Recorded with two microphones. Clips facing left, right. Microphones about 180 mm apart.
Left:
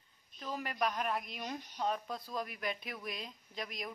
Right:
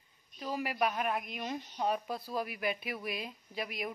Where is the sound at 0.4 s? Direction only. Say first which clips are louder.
Right 3 dB; 10° right (ahead or behind).